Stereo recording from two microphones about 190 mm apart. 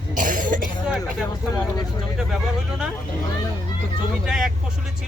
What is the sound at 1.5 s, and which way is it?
Speech, 20° left (ahead or behind).